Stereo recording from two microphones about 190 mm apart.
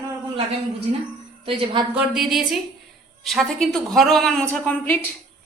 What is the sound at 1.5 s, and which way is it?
Speech, 25° right (ahead or behind).